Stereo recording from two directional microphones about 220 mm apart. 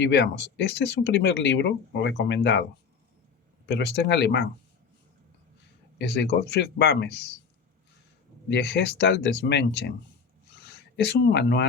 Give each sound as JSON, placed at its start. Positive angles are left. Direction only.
{"t": 0.0, "sound": "speech", "side_deg": 50}
{"t": 3.7, "sound": "speech", "side_deg": 50}
{"t": 6.0, "sound": "speech", "side_deg": 50}
{"t": 8.4, "sound": "speech", "side_deg": 50}